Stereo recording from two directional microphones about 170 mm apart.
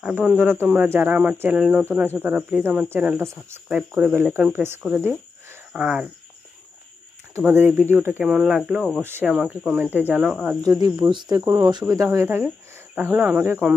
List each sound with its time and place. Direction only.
0.0 s speech: 5° right (ahead or behind)
7.3 s speech: 15° right (ahead or behind)
10.7 s speech: 25° right (ahead or behind)